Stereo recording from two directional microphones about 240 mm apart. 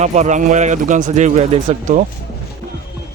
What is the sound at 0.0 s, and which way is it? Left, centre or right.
Speech, right.